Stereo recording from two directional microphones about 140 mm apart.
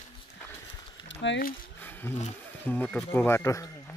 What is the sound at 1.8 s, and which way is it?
Wild animals, 15° left (ahead or behind).